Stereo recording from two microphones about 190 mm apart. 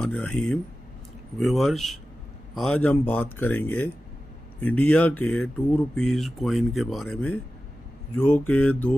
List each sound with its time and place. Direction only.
0.0 s speech: 5° left (ahead or behind)